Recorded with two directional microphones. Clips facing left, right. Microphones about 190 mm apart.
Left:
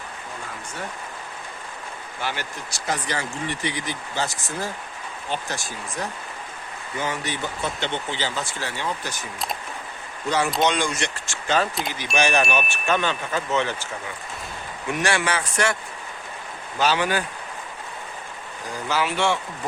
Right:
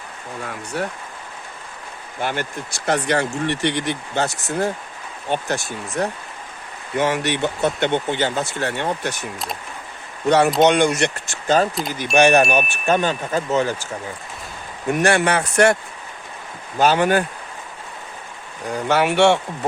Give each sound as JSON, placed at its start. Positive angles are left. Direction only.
{"t": 0.7, "sound": "speech", "side_deg": -70}
{"t": 2.2, "sound": "speech", "side_deg": -55}
{"t": 6.9, "sound": "speech", "side_deg": -75}
{"t": 10.2, "sound": "speech", "side_deg": -65}
{"t": 11.4, "sound": "speech", "side_deg": -40}
{"t": 11.7, "sound": "speech", "side_deg": 0}
{"t": 12.1, "sound": "wind chime", "side_deg": -55}
{"t": 14.8, "sound": "wind chime", "side_deg": -50}
{"t": 18.7, "sound": "speech", "side_deg": -60}